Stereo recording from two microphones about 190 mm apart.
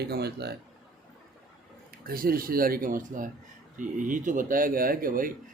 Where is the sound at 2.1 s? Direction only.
50° right (ahead or behind).